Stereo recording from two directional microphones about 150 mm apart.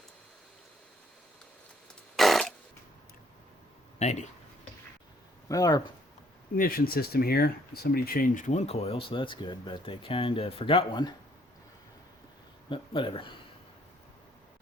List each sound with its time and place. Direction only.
2.1 s burping: centre (ahead or behind)
3.9 s speech: 50° left (ahead or behind)
5.5 s speech: 25° left (ahead or behind)
6.6 s speech: 80° left; by 11.1 s 35° left (ahead or behind)
12.6 s speech: 35° left (ahead or behind)